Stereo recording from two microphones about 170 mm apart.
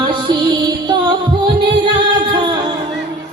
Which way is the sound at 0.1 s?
30° right (ahead or behind).